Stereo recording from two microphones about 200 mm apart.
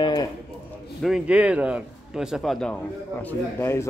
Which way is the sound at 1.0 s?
5° right (ahead or behind).